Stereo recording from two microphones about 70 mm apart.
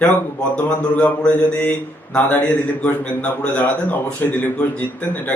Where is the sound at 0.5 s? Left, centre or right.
Left.